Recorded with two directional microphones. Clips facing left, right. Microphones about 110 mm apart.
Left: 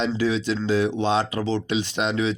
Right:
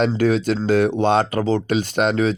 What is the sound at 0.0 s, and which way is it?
A man's voice, 50° right (ahead or behind).